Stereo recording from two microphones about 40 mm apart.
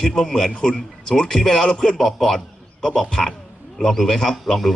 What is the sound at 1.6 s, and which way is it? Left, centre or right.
Speech, left.